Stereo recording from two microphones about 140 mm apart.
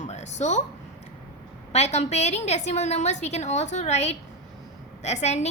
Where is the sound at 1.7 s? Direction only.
50° left (ahead or behind).